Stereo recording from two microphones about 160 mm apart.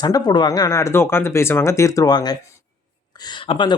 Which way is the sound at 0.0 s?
25° left (ahead or behind).